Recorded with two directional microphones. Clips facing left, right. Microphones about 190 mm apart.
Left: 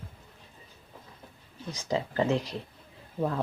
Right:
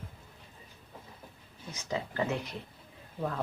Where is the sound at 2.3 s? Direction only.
90° left.